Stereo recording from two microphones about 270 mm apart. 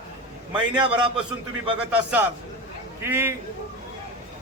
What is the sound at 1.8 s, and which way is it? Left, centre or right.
A man's voice, centre.